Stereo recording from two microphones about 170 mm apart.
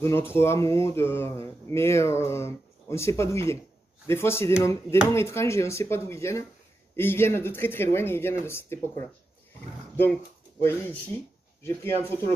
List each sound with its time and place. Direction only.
0.0 s speech: 15° left (ahead or behind)
10.6 s speech: 15° left (ahead or behind)
12.0 s speech: 15° left (ahead or behind)